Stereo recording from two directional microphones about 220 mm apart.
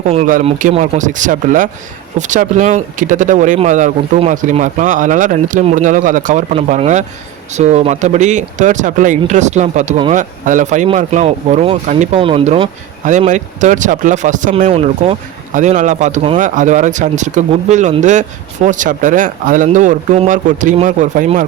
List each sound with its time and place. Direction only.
0.0 s speech: 35° right (ahead or behind)